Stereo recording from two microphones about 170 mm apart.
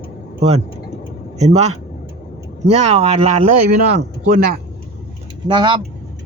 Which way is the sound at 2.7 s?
40° right (ahead or behind).